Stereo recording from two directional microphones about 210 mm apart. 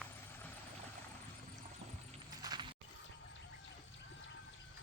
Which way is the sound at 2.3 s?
20° right (ahead or behind).